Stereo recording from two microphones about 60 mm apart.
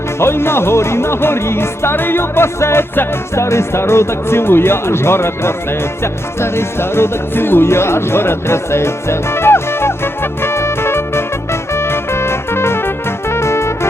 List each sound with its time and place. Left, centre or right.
0.2 s music: left
3.3 s music: left